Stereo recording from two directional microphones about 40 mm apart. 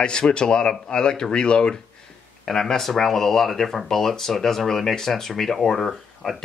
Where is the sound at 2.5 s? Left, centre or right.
Centre.